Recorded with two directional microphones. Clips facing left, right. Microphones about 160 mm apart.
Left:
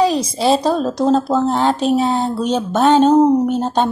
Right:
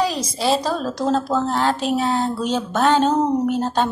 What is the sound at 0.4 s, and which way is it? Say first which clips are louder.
Speech: left 4 dB; 30° left (ahead or behind).